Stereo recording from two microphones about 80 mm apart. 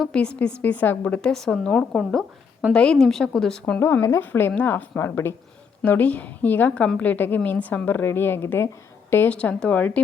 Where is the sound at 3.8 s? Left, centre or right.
Left.